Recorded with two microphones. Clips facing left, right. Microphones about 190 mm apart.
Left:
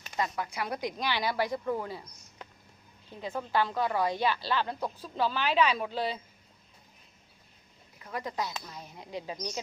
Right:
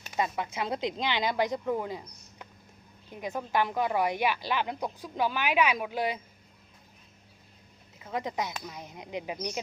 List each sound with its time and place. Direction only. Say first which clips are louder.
0.2 s a woman's voice: right 2 dB; 20° right (ahead or behind)
7.9 s a woman's voice: right 2 dB; 20° right (ahead or behind)